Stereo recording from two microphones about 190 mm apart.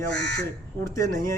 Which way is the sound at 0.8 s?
15° left (ahead or behind).